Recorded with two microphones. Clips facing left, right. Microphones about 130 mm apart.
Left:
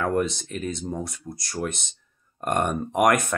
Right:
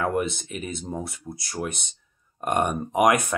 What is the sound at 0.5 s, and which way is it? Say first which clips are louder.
Speech: left 2 dB; 10° right (ahead or behind).